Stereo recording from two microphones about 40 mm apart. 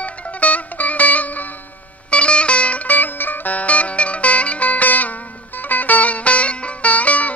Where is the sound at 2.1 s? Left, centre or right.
Left.